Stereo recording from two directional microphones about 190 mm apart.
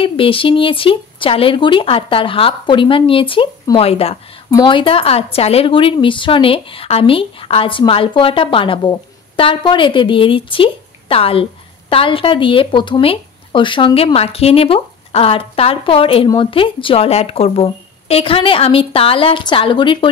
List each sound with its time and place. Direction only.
0.0 s a woman's voice: 30° left (ahead or behind)